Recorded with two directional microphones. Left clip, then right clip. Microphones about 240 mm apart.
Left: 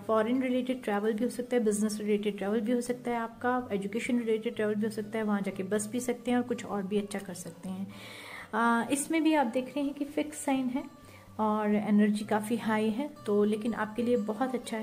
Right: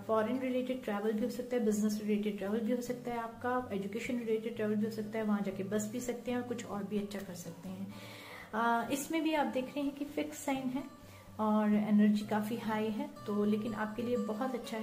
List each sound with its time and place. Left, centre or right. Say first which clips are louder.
0.1 s a woman's voice: left 4 dB; left
8.5 s a woman's voice: left 4 dB; left